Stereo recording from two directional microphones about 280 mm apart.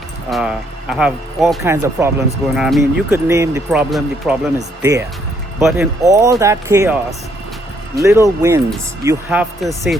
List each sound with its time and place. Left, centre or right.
0.3 s speech: centre
7.9 s speech: centre